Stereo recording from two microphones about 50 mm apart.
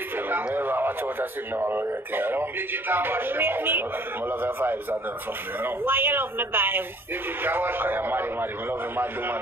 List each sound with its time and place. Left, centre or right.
0.6 s radio: right
1.6 s a man's voice: right
5.9 s a man's voice: right